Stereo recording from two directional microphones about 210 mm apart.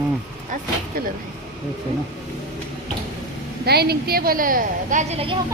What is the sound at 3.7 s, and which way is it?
A woman's voice, 50° right (ahead or behind).